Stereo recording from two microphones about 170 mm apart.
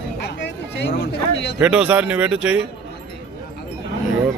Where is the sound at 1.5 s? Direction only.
5° right (ahead or behind).